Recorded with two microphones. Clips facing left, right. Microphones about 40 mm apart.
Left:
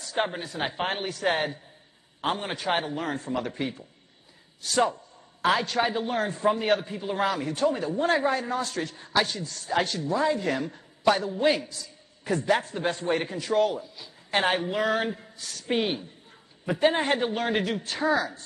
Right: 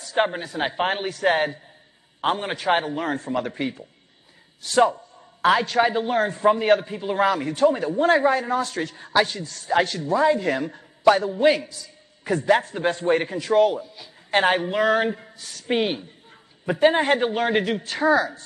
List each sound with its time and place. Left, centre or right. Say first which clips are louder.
0.1 s a man's voice: right 6 dB; centre
3.2 s a man's voice: right 4 dB; centre
4.7 s a sound: right 6 dB; centre
5.8 s a man's voice: right 6 dB; centre
9.3 s a man's voice: right 5 dB; centre
13.0 s a man's voice: right 6 dB; centre
15.3 s a woman's voice: even; centre
15.7 s a man's voice: right 4 dB; centre